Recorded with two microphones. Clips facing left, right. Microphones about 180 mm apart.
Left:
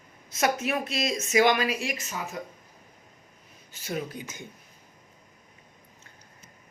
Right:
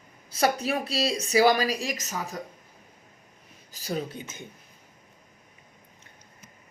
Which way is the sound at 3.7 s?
35° right (ahead or behind).